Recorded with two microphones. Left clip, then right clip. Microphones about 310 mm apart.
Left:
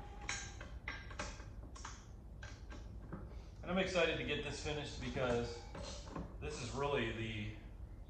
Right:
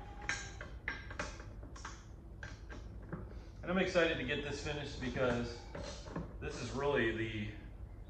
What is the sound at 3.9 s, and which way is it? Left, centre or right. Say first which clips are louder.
A man's voice: right 3 dB; centre.